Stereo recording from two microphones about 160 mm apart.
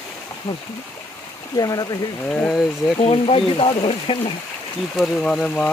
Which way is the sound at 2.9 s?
35° left (ahead or behind).